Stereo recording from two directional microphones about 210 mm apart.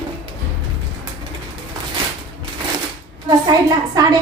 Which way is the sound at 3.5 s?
20° right (ahead or behind).